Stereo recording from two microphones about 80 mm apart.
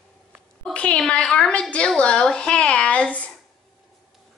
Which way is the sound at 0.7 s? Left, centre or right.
Centre.